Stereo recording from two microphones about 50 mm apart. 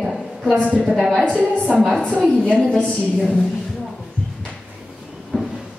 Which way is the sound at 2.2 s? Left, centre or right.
Centre.